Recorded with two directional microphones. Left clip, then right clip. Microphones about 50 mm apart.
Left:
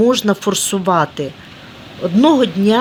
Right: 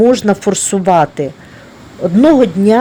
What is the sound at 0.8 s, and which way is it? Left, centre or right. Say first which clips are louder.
Speech: right 6 dB; right.